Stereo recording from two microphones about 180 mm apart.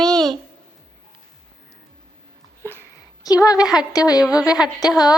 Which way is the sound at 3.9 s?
20° left (ahead or behind).